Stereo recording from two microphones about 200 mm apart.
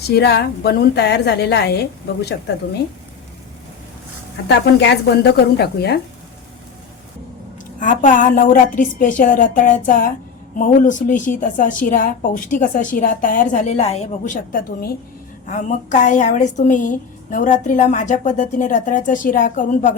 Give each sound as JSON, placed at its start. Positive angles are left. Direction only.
{"t": 0.0, "sound": "a woman's voice", "side_deg": 55}
{"t": 4.4, "sound": "a woman's voice", "side_deg": 60}
{"t": 7.8, "sound": "a woman's voice", "side_deg": 40}